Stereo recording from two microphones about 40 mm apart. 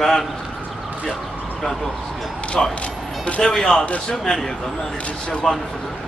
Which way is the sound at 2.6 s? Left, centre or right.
Left.